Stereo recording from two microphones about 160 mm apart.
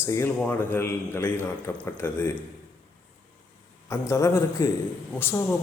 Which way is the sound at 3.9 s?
20° left (ahead or behind).